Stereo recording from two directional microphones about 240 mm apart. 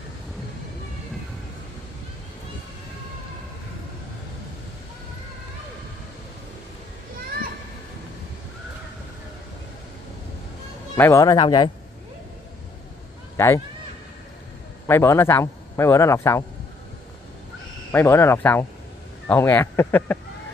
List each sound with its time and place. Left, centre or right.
11.0 s a man's voice: centre
13.4 s a man's voice: centre
14.9 s a man's voice: centre
17.9 s a man's voice: centre